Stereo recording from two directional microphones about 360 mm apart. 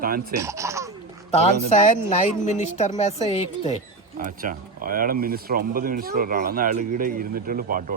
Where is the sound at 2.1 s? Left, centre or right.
Centre.